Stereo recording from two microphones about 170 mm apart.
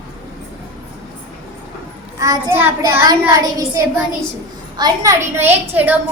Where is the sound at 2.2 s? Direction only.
15° right (ahead or behind).